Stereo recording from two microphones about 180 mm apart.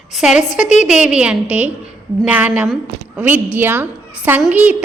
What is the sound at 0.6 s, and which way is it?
Speech, 40° left (ahead or behind).